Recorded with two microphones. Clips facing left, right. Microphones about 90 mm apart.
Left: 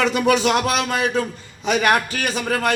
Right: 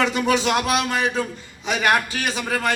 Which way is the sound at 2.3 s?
45° left (ahead or behind).